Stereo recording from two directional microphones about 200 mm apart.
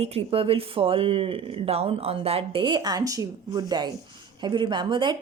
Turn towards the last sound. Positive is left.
turn(degrees=-25)  # may be behind; listen again after turning